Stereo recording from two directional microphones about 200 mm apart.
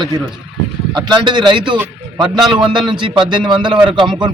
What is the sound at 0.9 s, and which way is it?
Speech, 20° right (ahead or behind).